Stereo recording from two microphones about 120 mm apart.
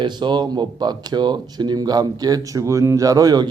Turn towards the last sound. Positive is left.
turn(degrees=-35)  # may be behind; listen again after turning